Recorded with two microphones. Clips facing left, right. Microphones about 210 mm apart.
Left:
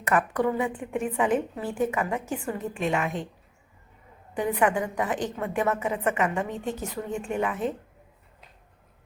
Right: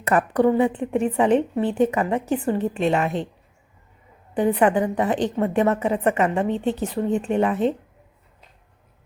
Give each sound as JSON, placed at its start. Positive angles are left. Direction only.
{"t": 0.0, "sound": "a woman's voice", "side_deg": -35}
{"t": 4.4, "sound": "a woman's voice", "side_deg": -30}